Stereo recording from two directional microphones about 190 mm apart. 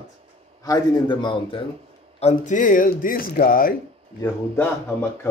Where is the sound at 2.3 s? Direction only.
45° left (ahead or behind).